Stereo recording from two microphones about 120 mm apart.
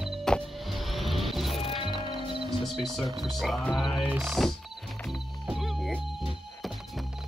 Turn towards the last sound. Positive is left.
turn(degrees=0)  # may be behind; listen again after turning